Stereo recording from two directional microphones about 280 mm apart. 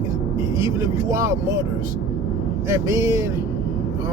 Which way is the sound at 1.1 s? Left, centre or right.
Centre.